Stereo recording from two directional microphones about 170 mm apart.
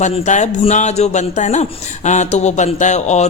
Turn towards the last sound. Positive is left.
turn(degrees=40)  # may be behind; listen again after turning